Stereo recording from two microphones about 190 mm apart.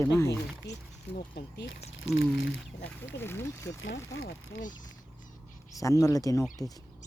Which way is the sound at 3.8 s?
80° left.